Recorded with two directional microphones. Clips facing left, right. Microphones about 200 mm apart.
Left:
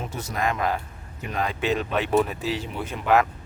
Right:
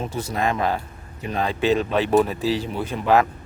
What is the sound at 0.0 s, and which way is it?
A man's voice, 30° right (ahead or behind).